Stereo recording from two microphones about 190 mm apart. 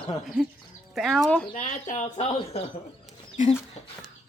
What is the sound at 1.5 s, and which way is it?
Speech, 40° left (ahead or behind).